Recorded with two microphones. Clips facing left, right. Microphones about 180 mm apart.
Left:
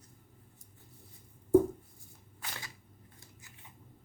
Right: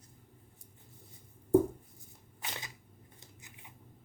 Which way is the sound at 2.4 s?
20° right (ahead or behind).